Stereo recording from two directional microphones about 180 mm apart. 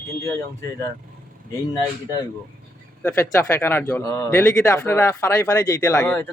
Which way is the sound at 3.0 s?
15° left (ahead or behind).